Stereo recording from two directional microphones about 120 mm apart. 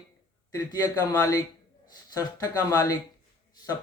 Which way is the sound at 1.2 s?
25° left (ahead or behind).